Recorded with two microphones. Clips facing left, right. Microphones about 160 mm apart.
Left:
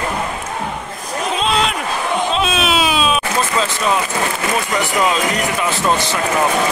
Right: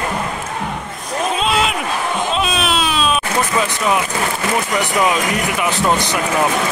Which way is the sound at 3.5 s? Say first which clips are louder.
Right 1 dB; 15° right (ahead or behind).